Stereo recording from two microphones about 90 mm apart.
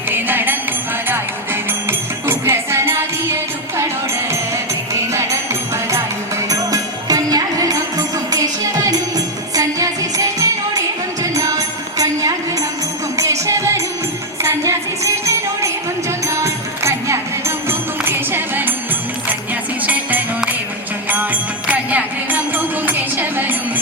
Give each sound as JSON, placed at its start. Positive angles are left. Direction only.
{"t": 0.1, "sound": "music", "side_deg": -20}
{"t": 1.9, "sound": "music", "side_deg": -25}
{"t": 4.9, "sound": "music", "side_deg": -35}
{"t": 6.5, "sound": "music", "side_deg": -40}
{"t": 19.9, "sound": "music", "side_deg": -20}
{"t": 21.7, "sound": "music", "side_deg": -15}
{"t": 23.1, "sound": "a sound", "side_deg": -20}